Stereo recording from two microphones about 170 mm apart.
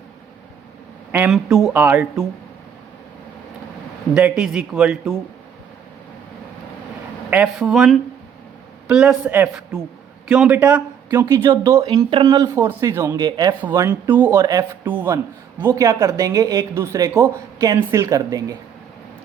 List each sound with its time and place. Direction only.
1.3 s speech: centre (ahead or behind)
4.1 s speech: 5° right (ahead or behind)
7.3 s speech: 5° right (ahead or behind)